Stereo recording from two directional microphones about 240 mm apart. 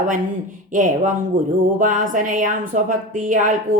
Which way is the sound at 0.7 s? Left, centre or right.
Right.